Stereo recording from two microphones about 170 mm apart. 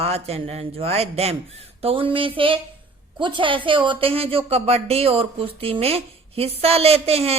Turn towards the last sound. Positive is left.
turn(degrees=-35)  # may be behind; listen again after turning